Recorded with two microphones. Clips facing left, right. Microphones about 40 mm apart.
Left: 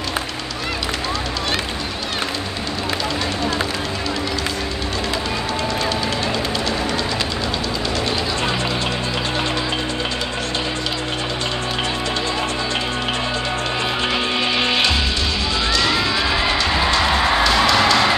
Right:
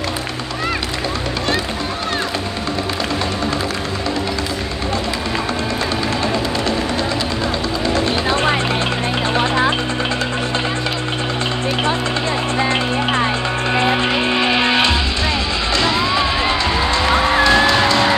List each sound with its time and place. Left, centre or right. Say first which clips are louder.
8.3 s a sound: right 5 dB; right
9.4 s music: right 6 dB; right
13.7 s music: right 6 dB; right
16.9 s music: right 4 dB; right